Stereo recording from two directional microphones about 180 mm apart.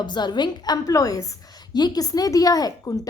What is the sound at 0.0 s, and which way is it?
A woman's voice, 25° left (ahead or behind).